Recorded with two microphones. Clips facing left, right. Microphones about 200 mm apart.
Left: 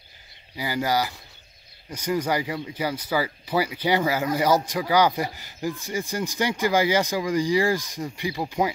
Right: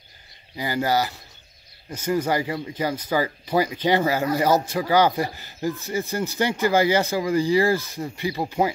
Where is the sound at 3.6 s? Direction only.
10° left (ahead or behind).